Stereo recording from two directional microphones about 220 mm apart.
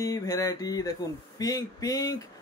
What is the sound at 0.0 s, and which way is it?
Speech, 15° left (ahead or behind).